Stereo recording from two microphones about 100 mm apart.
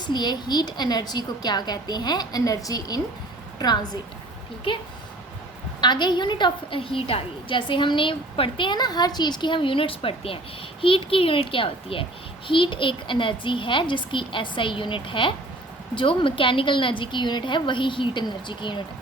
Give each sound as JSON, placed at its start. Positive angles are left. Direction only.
{"t": 0.0, "sound": "a woman's voice", "side_deg": 45}
{"t": 4.7, "sound": "a child's voice", "side_deg": 60}
{"t": 5.8, "sound": "a woman's voice", "side_deg": 50}